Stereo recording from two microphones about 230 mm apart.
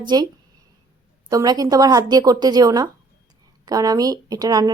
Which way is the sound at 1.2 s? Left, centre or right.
Centre.